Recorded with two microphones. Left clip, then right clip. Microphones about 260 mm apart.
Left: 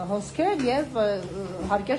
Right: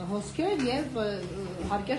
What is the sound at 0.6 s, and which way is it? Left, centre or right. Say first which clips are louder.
Speech: left 6 dB; left.